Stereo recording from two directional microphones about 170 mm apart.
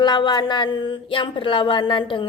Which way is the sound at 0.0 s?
25° left (ahead or behind).